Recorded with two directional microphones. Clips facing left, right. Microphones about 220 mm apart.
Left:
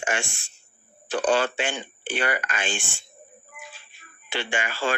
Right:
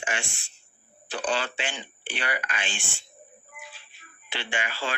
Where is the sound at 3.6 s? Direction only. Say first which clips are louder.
Left 2 dB; 45° left (ahead or behind).